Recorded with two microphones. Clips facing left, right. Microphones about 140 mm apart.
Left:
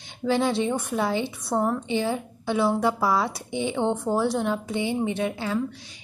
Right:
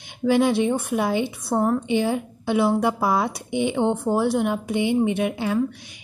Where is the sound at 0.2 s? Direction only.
15° right (ahead or behind).